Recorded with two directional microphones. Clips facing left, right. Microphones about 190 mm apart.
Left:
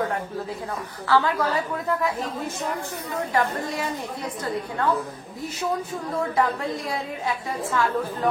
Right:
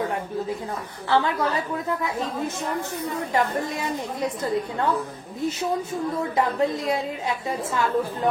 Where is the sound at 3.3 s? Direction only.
20° right (ahead or behind).